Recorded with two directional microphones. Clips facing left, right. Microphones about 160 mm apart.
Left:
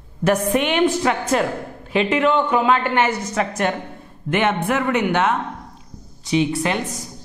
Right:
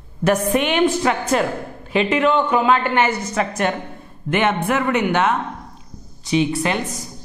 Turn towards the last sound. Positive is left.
turn(degrees=-5)  # may be behind; listen again after turning